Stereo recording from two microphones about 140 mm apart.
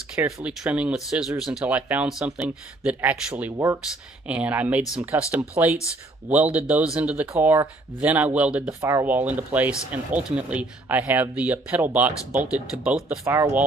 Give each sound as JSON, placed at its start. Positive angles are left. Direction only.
{"t": 0.1, "sound": "speech", "side_deg": -10}
{"t": 13.2, "sound": "speech", "side_deg": -20}